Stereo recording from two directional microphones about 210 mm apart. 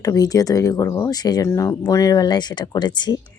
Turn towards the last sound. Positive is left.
turn(degrees=20)  # may be behind; listen again after turning